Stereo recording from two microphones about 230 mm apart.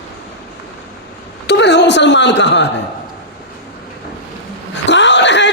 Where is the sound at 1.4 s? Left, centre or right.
Left.